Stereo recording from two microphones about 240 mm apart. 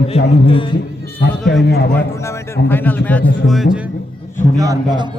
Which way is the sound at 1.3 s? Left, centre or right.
Centre.